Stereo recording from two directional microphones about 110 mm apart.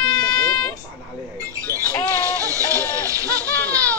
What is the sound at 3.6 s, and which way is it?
Baby laughter, 15° left (ahead or behind).